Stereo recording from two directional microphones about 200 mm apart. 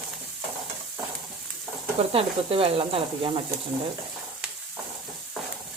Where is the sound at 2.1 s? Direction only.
25° right (ahead or behind).